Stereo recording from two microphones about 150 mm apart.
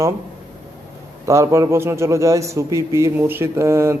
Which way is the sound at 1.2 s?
20° right (ahead or behind).